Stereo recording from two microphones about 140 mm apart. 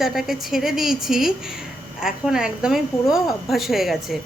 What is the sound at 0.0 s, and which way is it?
A woman's voice, 5° right (ahead or behind).